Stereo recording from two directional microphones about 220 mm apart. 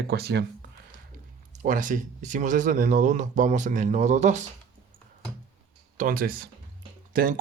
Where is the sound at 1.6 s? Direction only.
35° right (ahead or behind).